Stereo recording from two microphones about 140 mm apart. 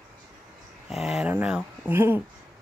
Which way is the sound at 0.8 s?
Centre (ahead or behind).